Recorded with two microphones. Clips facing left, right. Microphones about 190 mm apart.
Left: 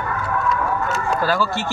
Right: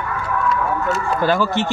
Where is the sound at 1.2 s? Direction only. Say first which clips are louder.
Right 5 dB; 20° right (ahead or behind).